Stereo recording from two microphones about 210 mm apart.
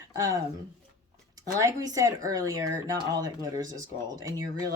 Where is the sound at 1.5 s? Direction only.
15° right (ahead or behind).